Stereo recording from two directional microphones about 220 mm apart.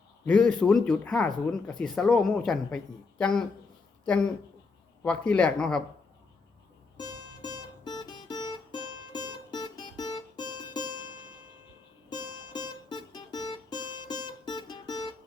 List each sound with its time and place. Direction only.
0.3 s speech: 5° left (ahead or behind)
5.0 s speech: 5° left (ahead or behind)
6.9 s music: 20° left (ahead or behind)
7.9 s guitar: 20° left (ahead or behind)
9.1 s music: 20° left (ahead or behind)